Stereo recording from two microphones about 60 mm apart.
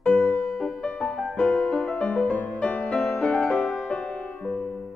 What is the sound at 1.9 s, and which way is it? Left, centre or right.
Music, centre.